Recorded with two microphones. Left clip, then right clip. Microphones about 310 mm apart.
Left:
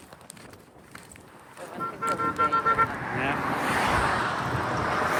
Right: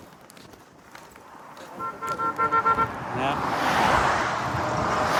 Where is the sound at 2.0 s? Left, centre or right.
Centre.